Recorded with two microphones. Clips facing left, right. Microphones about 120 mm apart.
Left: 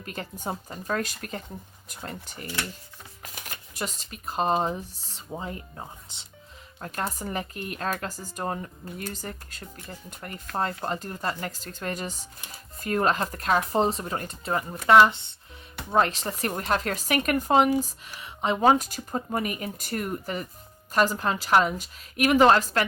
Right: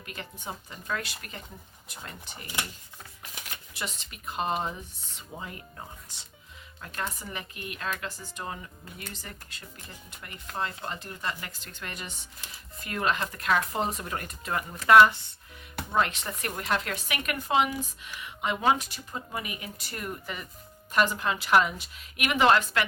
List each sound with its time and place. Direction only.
0.0 s speech: 40° left (ahead or behind)
3.4 s speech: 45° left (ahead or behind); by 6.2 s 25° left (ahead or behind)
6.7 s speech: 40° left (ahead or behind); by 15.4 s 25° left (ahead or behind)
15.9 s speech: 35° left (ahead or behind)